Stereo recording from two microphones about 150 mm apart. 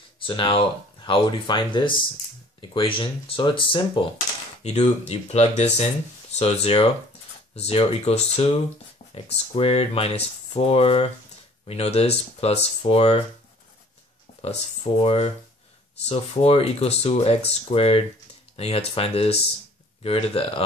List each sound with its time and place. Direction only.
0.3 s speech: 35° left (ahead or behind)
4.6 s speech: 45° left (ahead or behind)
15.0 s speech: 40° left (ahead or behind)